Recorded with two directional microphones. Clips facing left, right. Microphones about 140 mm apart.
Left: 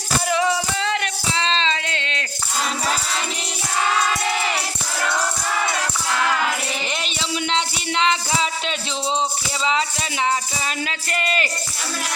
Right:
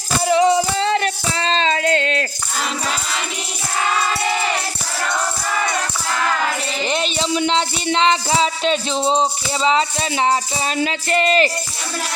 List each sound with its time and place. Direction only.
0.3 s music: 25° right (ahead or behind); by 2.2 s 45° right (ahead or behind)
6.9 s music: 35° right (ahead or behind)